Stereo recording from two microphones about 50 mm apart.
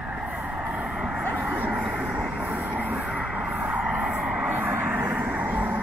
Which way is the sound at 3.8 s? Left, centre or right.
Right.